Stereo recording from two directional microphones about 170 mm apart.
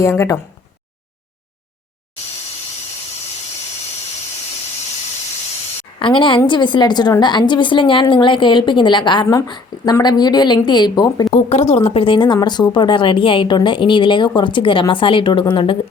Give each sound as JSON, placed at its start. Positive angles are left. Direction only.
{"t": 0.0, "sound": "speech", "side_deg": 15}
{"t": 6.0, "sound": "a woman's voice", "side_deg": 30}
{"t": 11.4, "sound": "a woman's voice", "side_deg": 40}